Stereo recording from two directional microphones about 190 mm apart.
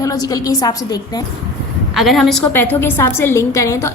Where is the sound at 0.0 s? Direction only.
20° left (ahead or behind).